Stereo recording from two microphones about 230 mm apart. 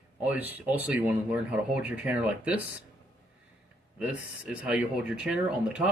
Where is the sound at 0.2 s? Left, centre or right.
Centre.